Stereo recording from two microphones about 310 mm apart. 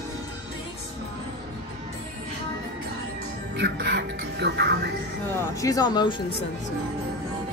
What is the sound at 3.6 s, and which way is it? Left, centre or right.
Speech, right.